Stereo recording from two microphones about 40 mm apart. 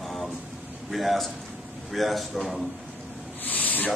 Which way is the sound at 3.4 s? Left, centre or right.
Left.